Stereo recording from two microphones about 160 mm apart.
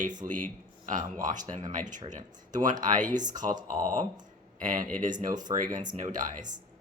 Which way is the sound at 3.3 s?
55° right (ahead or behind).